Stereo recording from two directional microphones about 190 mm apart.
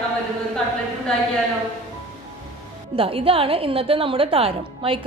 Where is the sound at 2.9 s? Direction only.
30° right (ahead or behind).